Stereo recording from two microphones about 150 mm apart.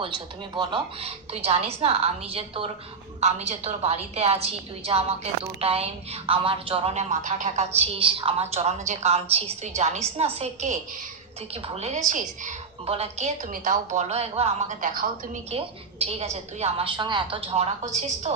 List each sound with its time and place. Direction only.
0.5 s a woman's voice: 30° right (ahead or behind); by 12.5 s 55° right (ahead or behind)
12.8 s a woman's voice: 40° right (ahead or behind)